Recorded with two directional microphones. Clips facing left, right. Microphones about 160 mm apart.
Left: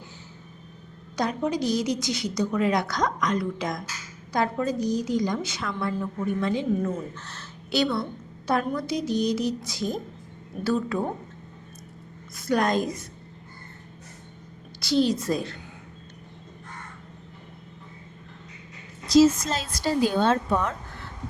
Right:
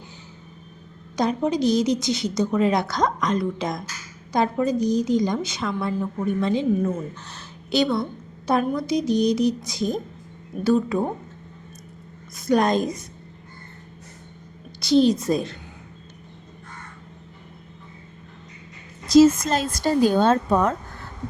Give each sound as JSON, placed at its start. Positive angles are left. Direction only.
{"t": 1.1, "sound": "a woman's voice", "side_deg": -20}
{"t": 12.4, "sound": "a woman's voice", "side_deg": -20}
{"t": 14.8, "sound": "a woman's voice", "side_deg": -20}
{"t": 19.0, "sound": "a woman's voice", "side_deg": -50}